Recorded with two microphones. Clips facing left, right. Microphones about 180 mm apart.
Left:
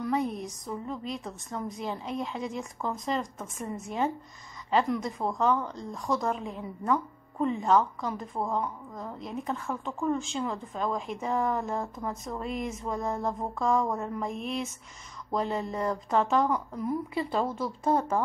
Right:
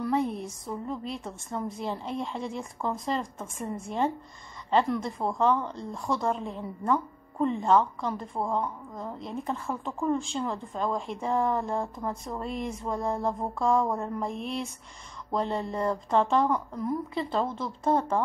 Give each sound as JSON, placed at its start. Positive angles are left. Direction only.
{"t": 0.0, "sound": "a woman's voice", "side_deg": 0}